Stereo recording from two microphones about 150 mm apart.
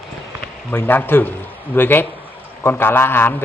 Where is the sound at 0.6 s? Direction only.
10° left (ahead or behind).